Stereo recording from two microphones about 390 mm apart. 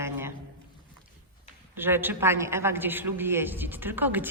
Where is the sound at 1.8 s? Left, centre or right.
Centre.